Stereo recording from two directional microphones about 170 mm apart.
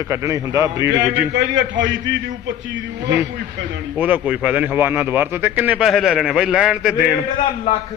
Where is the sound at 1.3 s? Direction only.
90° right.